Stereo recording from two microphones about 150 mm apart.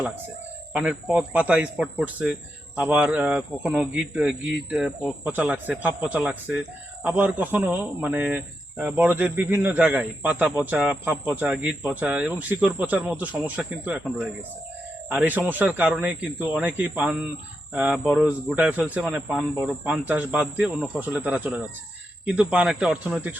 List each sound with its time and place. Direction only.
0.7 s speech: 5° right (ahead or behind)